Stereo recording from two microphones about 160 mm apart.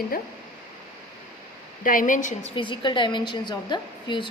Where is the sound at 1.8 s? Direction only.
55° left (ahead or behind).